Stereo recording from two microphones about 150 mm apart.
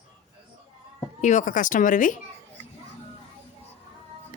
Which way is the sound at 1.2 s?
55° left (ahead or behind).